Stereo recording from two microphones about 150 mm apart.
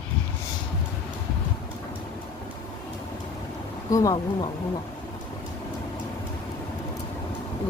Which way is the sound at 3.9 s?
20° left (ahead or behind).